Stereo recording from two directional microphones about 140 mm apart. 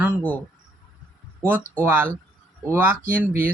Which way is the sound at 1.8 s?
15° right (ahead or behind).